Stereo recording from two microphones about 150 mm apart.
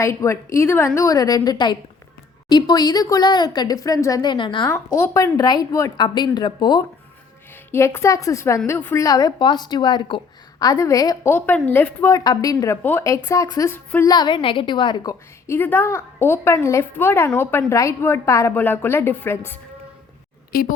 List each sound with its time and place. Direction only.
0.0 s a woman's voice: 20° left (ahead or behind)
4.9 s a woman's voice: 20° left (ahead or behind)
7.7 s a woman's voice: 15° left (ahead or behind)
12.1 s a woman's voice: 25° left (ahead or behind)
14.1 s a woman's voice: 30° left (ahead or behind)
15.4 s a woman's voice: 15° left (ahead or behind)
20.5 s speech: 80° left